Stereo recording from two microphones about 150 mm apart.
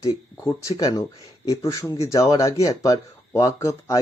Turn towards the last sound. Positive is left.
turn(degrees=20)  # may be behind; listen again after turning